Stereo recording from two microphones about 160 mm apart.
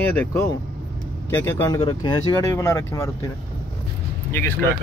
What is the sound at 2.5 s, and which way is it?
Speech, 15° left (ahead or behind).